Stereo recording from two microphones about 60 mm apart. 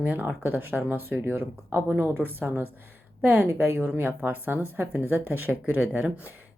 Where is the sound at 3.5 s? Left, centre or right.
Right.